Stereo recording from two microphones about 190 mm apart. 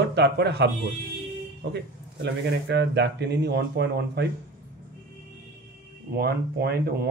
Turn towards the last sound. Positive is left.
turn(degrees=-55)  # may be behind; listen again after turning